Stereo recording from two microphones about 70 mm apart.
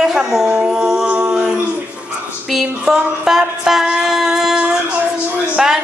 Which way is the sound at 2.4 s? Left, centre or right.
Centre.